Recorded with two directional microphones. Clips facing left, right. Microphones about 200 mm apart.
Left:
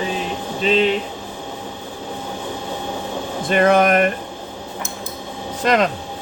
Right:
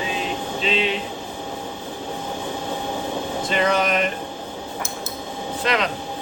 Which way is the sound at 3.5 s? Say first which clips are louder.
Left 7 dB; 55° left (ahead or behind).